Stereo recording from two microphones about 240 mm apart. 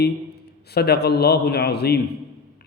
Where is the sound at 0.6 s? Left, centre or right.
Left.